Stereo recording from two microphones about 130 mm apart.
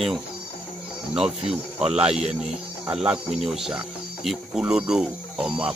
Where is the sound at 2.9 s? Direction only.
10° right (ahead or behind).